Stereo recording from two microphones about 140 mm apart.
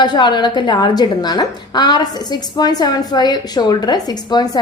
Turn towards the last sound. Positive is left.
turn(degrees=30)  # may be behind; listen again after turning